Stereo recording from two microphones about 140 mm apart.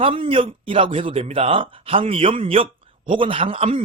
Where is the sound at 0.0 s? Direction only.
40° right (ahead or behind).